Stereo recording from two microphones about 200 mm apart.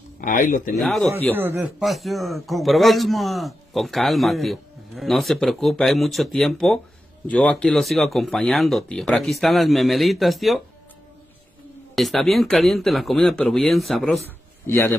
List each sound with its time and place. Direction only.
0.2 s speech: 40° left (ahead or behind)
0.7 s a man's voice: centre (ahead or behind)
1.3 s a man's voice: 10° right (ahead or behind)
11.9 s a man's voice: centre (ahead or behind)
14.7 s a man's voice: 10° left (ahead or behind)